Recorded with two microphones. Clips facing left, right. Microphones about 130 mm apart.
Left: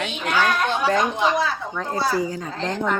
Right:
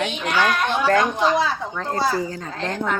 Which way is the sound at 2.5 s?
5° right (ahead or behind).